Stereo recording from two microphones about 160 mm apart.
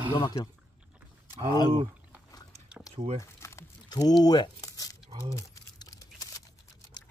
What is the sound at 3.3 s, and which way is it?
Crumpling, 15° left (ahead or behind).